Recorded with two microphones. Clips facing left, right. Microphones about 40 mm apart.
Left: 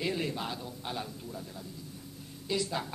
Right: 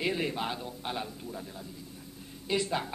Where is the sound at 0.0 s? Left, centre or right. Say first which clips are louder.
Right 2 dB; right.